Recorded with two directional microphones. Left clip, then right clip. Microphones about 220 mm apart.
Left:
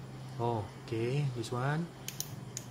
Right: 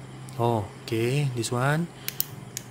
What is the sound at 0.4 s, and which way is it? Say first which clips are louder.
Speech: right 9 dB; 30° right (ahead or behind).